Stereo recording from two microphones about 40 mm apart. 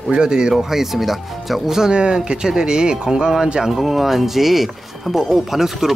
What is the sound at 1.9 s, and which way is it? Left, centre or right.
Speech, right.